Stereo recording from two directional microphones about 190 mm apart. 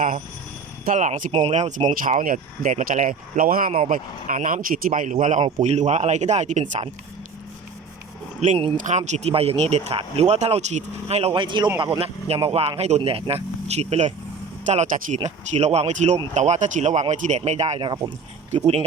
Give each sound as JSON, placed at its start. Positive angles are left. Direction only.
{"t": 0.9, "sound": "speech", "side_deg": -40}
{"t": 1.3, "sound": "speech", "side_deg": -30}
{"t": 8.4, "sound": "speech", "side_deg": -30}